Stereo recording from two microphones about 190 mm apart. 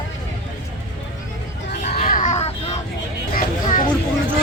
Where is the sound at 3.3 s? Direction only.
45° left (ahead or behind).